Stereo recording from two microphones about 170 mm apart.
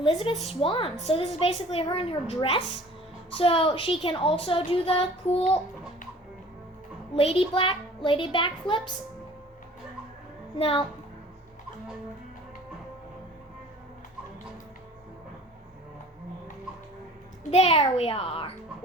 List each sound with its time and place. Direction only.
0.0 s a woman's voice: 30° left (ahead or behind)
7.2 s a woman's voice: 35° left (ahead or behind)
10.6 s a woman's voice: 35° left (ahead or behind)
17.5 s a woman's voice: 40° left (ahead or behind)